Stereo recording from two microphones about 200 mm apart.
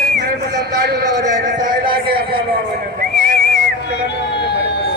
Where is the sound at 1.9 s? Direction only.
45° right (ahead or behind).